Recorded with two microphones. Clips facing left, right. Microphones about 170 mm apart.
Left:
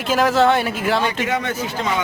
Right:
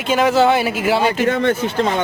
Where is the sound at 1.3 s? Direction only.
55° right (ahead or behind).